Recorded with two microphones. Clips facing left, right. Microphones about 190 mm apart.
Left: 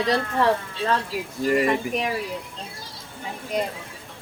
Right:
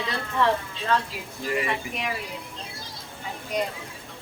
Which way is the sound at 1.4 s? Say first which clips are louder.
Left 7 dB; 45° left (ahead or behind).